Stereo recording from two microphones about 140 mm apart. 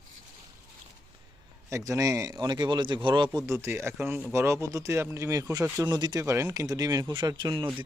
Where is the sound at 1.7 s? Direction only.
25° right (ahead or behind).